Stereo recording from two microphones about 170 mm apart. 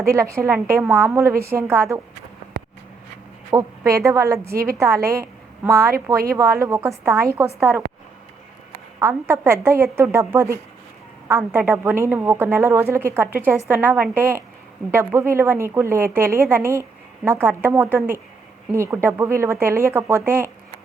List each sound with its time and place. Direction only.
0.0 s a woman's voice: 15° right (ahead or behind)
3.5 s a woman's voice: 15° right (ahead or behind)
9.0 s a woman's voice: 15° right (ahead or behind)